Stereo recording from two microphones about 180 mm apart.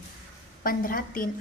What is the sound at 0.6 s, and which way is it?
Speech, 50° left (ahead or behind).